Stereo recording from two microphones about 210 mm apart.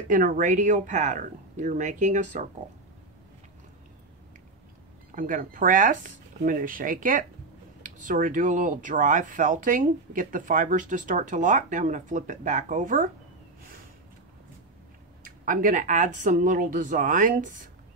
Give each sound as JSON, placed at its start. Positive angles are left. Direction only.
{"t": 0.1, "sound": "speech", "side_deg": -40}
{"t": 5.1, "sound": "speech", "side_deg": -40}
{"t": 15.2, "sound": "speech", "side_deg": -40}